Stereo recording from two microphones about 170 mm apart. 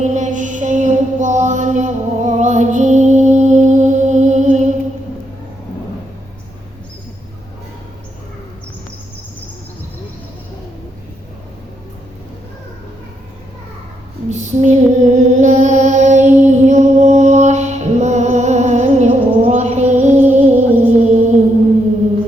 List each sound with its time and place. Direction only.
0.0 s mantra: 45° right (ahead or behind)
14.3 s music: 45° right (ahead or behind)